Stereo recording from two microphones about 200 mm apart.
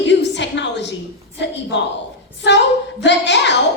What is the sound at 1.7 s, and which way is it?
Speech, 60° left (ahead or behind).